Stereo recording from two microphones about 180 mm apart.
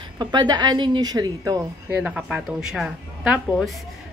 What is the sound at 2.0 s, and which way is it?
Speech, 5° right (ahead or behind).